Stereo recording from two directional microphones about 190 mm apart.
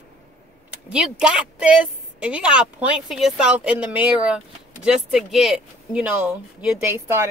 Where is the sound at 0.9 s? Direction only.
5° right (ahead or behind).